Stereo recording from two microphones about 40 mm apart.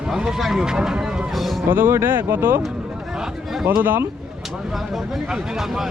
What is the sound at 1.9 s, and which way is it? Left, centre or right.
Speech, right.